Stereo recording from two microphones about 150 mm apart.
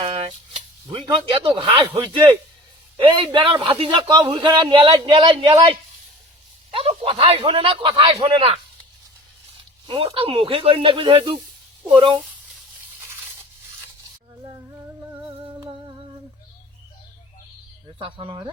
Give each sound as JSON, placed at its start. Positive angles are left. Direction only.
{"t": 0.0, "sound": "a sound", "side_deg": -40}
{"t": 0.9, "sound": "a man's voice", "side_deg": -30}
{"t": 3.0, "sound": "a man's voice", "side_deg": -35}
{"t": 6.7, "sound": "a man's voice", "side_deg": -40}
{"t": 9.8, "sound": "a man's voice", "side_deg": -35}
{"t": 18.0, "sound": "a man's voice", "side_deg": -35}